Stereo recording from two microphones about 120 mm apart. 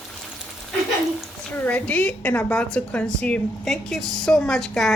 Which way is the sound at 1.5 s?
15° left (ahead or behind).